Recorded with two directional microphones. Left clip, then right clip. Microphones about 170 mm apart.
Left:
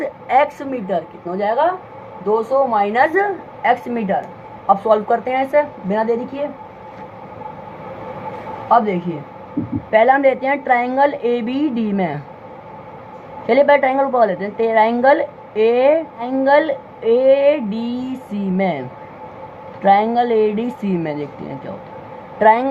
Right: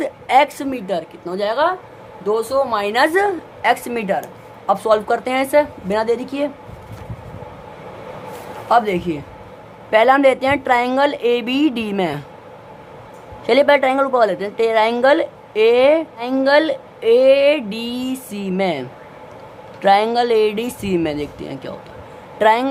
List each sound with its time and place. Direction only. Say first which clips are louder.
0.0 s a sound: right 1 dB; 25° right (ahead or behind)
0.6 s a woman's voice: left 1 dB; 30° right (ahead or behind)
2.7 s a woman's voice: right 1 dB; 35° right (ahead or behind)
4.7 s a woman's voice: left 2 dB; 30° right (ahead or behind)
8.7 s a woman's voice: even; 35° right (ahead or behind)
13.5 s a woman's voice: even; 25° right (ahead or behind)